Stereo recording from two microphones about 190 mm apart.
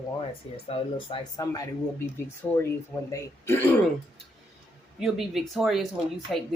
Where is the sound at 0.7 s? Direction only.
30° left (ahead or behind); by 3.7 s 10° left (ahead or behind).